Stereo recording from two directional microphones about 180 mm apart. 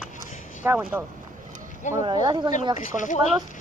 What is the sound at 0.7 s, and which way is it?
Speech, 10° right (ahead or behind).